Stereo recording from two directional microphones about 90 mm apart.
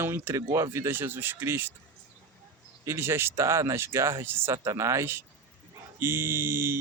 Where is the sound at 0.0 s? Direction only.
30° right (ahead or behind).